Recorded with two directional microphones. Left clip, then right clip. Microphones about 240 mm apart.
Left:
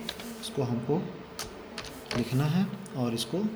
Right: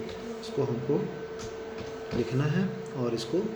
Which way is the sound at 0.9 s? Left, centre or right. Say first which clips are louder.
Right 1 dB; left.